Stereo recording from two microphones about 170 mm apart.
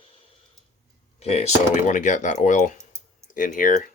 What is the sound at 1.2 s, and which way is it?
Speech, 40° left (ahead or behind).